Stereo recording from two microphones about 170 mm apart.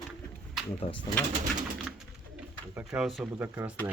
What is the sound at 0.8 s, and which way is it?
Speech, 45° left (ahead or behind).